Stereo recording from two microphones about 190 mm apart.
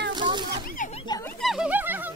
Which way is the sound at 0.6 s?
40° left (ahead or behind).